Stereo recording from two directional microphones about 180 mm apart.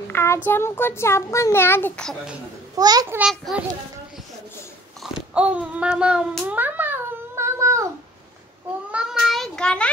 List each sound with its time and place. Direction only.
0.1 s a sound: 15° left (ahead or behind)
0.5 s a child's voice: 15° left (ahead or behind)
2.7 s a child's voice: 20° right (ahead or behind)
3.2 s a child's voice: 5° right (ahead or behind)
5.0 s a sound: 5° right (ahead or behind)
8.9 s child singing: 5° right (ahead or behind)